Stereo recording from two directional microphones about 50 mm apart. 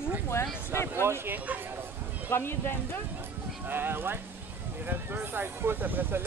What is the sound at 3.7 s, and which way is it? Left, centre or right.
Speech, right.